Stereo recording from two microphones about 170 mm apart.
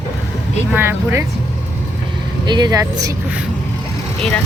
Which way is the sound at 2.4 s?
25° right (ahead or behind).